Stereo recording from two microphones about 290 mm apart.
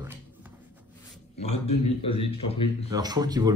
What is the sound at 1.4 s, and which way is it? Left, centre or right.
Speech, left.